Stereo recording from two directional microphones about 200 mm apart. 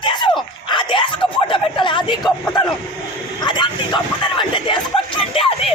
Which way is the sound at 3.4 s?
20° left (ahead or behind).